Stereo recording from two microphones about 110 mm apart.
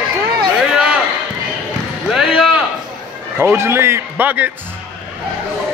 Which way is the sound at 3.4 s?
20° right (ahead or behind).